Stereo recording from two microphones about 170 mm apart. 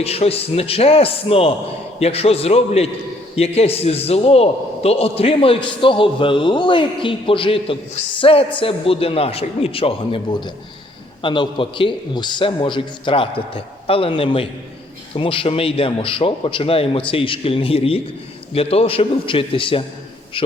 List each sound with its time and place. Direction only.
0.0 s a man's voice: 35° left (ahead or behind)